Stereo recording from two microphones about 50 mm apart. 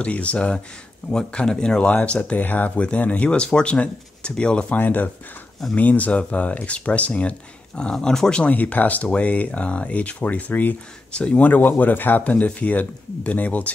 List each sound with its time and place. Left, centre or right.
0.0 s speech: left
1.8 s speech: left
3.3 s speech: centre
4.7 s speech: left
7.9 s speech: centre
8.5 s speech: left
11.1 s speech: left